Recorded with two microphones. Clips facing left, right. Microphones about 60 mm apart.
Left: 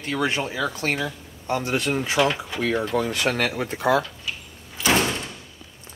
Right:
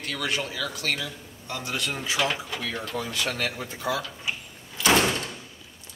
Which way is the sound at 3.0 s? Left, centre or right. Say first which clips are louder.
Left 6 dB; left.